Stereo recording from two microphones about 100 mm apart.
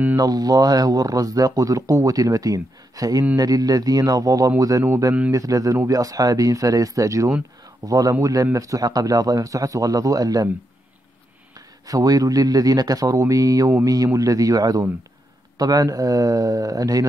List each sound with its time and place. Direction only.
0.1 s speech: 40° right (ahead or behind)
11.5 s speech: 35° right (ahead or behind)